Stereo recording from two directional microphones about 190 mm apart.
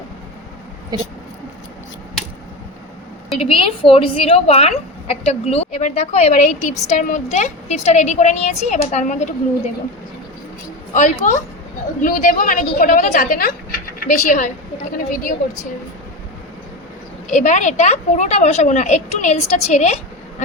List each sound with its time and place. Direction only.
0.9 s speech: 20° right (ahead or behind)
3.3 s a woman's voice: 30° left (ahead or behind)
10.9 s a woman's voice: 40° left (ahead or behind)
17.3 s a woman's voice: 40° left (ahead or behind)